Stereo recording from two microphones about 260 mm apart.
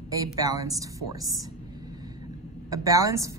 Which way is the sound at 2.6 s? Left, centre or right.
Centre.